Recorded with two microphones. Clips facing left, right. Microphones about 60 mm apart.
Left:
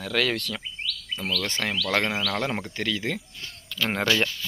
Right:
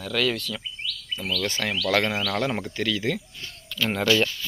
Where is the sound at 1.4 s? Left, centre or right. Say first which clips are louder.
Right 1 dB; left.